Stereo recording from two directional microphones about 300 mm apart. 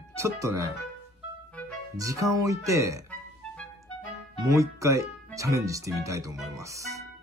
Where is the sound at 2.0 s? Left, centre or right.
Centre.